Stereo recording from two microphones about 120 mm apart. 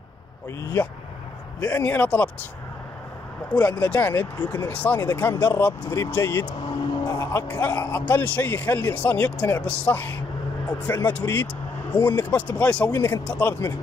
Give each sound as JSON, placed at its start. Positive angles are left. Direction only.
{"t": 1.6, "sound": "speech", "side_deg": 10}
{"t": 3.8, "sound": "speech", "side_deg": 15}
{"t": 6.4, "sound": "vehicle", "side_deg": 40}
{"t": 7.2, "sound": "speech", "side_deg": 25}